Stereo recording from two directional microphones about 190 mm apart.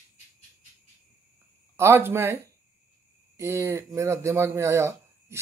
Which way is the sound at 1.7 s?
15° right (ahead or behind).